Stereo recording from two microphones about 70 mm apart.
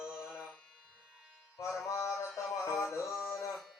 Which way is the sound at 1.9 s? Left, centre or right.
Left.